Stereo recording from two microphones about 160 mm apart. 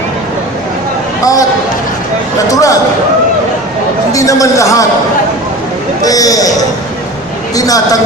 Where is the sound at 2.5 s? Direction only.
20° left (ahead or behind).